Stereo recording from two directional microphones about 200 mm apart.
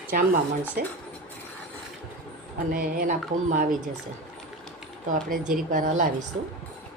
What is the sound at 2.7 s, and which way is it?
Speech, 45° right (ahead or behind).